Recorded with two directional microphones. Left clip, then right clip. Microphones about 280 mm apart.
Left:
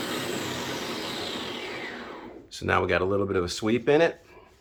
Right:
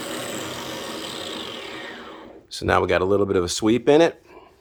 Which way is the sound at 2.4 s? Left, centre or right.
Right.